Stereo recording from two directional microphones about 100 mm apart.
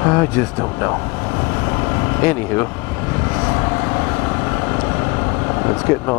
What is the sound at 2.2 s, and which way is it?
Speech, 25° left (ahead or behind).